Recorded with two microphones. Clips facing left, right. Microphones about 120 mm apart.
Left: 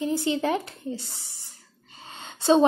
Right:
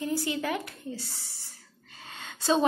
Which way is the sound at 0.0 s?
20° left (ahead or behind).